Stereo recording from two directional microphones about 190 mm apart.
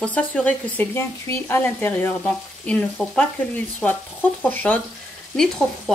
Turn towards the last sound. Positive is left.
turn(degrees=5)  # may be behind; listen again after turning